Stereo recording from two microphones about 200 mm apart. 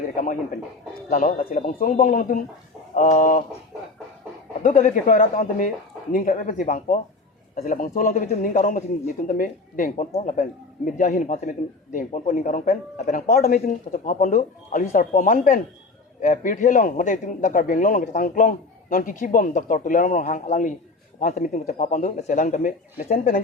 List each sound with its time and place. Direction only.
1.1 s a man's voice: 40° left (ahead or behind)
4.6 s a man's voice: 40° left (ahead or behind)